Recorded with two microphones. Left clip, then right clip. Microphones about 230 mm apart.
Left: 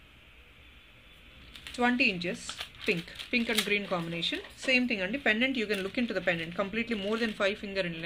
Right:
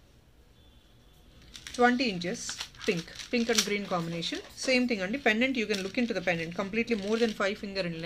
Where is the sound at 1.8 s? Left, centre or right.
Centre.